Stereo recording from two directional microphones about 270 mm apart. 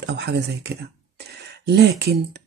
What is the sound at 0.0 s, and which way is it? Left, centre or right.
Speech, right.